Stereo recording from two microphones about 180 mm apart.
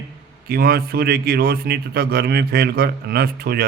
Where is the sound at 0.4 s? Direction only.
60° right (ahead or behind).